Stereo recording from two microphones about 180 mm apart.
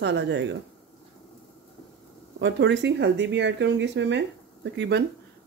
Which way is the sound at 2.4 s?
80° right.